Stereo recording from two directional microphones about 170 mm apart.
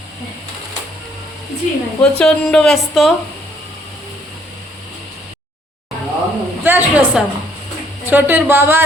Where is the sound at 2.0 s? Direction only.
5° left (ahead or behind).